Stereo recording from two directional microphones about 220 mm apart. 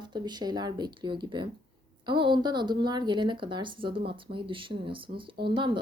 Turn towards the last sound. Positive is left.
turn(degrees=-20)  # may be behind; listen again after turning